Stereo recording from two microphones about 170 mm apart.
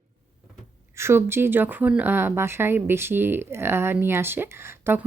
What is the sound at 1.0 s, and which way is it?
Speech, 15° right (ahead or behind).